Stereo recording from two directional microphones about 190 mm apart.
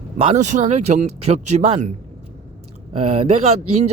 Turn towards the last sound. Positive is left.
turn(degrees=-35)  # may be behind; listen again after turning